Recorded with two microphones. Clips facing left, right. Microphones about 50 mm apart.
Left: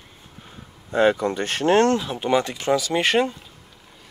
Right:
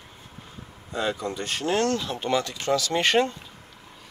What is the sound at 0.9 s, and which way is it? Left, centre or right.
Speech, left.